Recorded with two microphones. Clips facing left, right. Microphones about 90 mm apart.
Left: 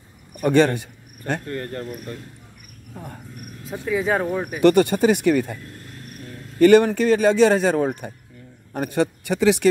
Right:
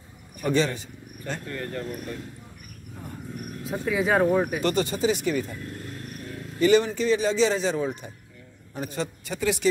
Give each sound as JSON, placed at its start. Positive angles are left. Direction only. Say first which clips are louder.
{"t": 0.4, "sound": "speech", "louder": "left 7 dB", "side_deg": 60}
{"t": 1.5, "sound": "speech", "louder": "left 3 dB", "side_deg": 35}
{"t": 3.8, "sound": "speech", "louder": "even", "side_deg": 0}
{"t": 4.6, "sound": "speech", "louder": "left 8 dB", "side_deg": 60}
{"t": 6.6, "sound": "speech", "louder": "left 7 dB", "side_deg": 65}